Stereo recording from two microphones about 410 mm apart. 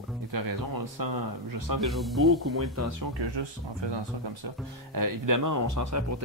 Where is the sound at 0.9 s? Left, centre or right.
Right.